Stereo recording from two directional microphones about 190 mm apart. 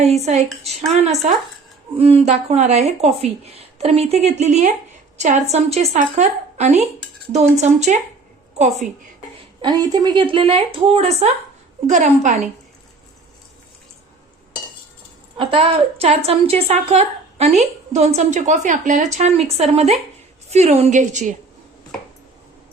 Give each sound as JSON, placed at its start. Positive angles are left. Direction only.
{"t": 0.0, "sound": "a woman's voice", "side_deg": -35}
{"t": 9.6, "sound": "a woman's voice", "side_deg": -20}
{"t": 15.4, "sound": "a woman's voice", "side_deg": -30}